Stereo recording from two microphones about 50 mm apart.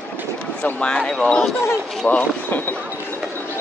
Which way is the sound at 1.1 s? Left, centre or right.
Centre.